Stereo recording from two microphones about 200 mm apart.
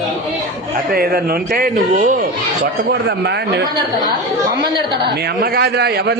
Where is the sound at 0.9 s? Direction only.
50° right (ahead or behind).